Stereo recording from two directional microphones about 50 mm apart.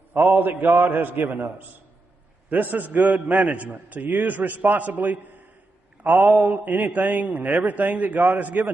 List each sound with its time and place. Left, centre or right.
0.1 s a man's voice: right